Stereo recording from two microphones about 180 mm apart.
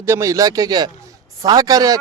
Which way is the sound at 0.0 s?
15° right (ahead or behind).